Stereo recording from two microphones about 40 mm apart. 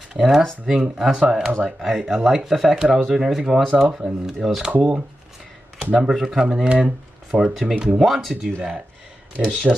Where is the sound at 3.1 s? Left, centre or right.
Centre.